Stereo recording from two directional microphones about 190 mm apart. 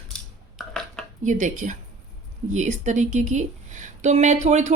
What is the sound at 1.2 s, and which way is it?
Speech, 40° right (ahead or behind).